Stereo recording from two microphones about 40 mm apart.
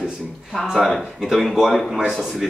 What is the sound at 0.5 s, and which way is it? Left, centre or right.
A woman's voice, centre.